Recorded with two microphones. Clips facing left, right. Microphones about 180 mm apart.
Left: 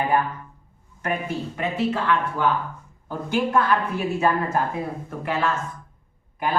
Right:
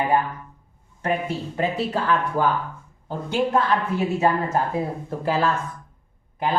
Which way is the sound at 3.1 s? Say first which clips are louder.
Right 1 dB; 25° right (ahead or behind).